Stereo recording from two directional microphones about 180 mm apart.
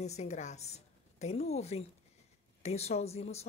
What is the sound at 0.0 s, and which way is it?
A woman's voice, 40° left (ahead or behind).